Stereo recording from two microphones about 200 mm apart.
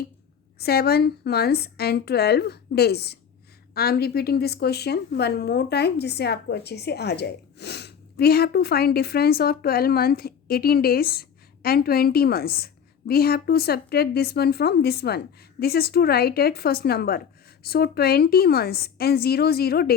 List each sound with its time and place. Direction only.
0.6 s a woman's voice: 50° left (ahead or behind)